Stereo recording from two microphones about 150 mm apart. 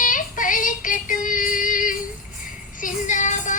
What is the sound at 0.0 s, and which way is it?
Music, 60° left (ahead or behind).